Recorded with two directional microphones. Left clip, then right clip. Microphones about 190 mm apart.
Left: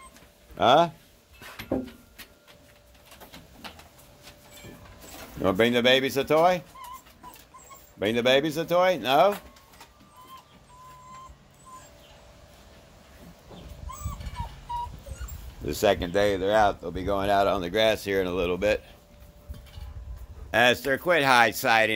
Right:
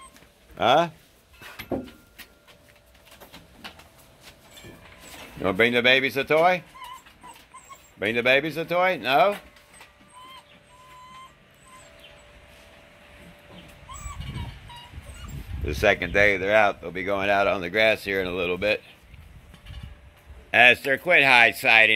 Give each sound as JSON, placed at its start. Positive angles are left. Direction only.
{"t": 0.6, "sound": "speech", "side_deg": 15}
{"t": 5.4, "sound": "speech", "side_deg": 10}
{"t": 8.0, "sound": "speech", "side_deg": 15}
{"t": 15.6, "sound": "speech", "side_deg": 10}
{"t": 20.5, "sound": "speech", "side_deg": 10}